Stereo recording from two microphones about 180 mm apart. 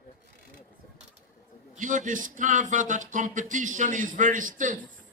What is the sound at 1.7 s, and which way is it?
Speech, 45° right (ahead or behind).